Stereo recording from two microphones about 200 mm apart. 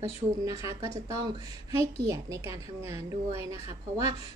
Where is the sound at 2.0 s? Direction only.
15° right (ahead or behind).